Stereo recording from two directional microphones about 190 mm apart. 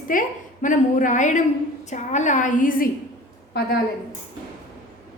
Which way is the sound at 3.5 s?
60° left (ahead or behind).